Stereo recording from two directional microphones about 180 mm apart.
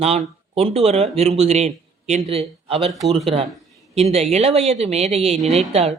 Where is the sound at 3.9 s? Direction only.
35° right (ahead or behind).